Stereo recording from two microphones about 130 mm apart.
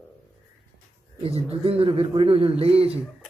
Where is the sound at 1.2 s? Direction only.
50° right (ahead or behind).